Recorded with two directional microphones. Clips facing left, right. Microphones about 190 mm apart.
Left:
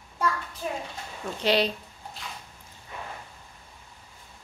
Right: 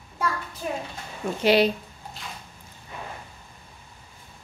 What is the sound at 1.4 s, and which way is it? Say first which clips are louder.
Speech: right 5 dB; 10° right (ahead or behind).